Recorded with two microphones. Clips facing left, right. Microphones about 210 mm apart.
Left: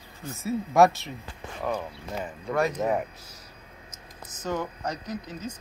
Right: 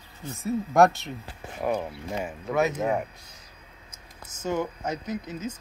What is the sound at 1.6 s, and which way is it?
Speech, 15° right (ahead or behind).